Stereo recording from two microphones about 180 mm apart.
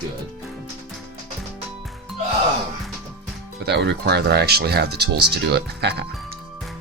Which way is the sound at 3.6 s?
70° right (ahead or behind).